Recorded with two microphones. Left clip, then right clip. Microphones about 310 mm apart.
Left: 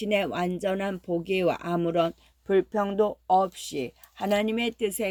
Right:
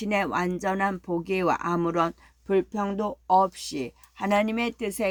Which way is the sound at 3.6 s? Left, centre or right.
Centre.